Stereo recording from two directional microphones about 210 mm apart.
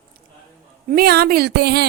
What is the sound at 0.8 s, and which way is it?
Speech, 45° right (ahead or behind).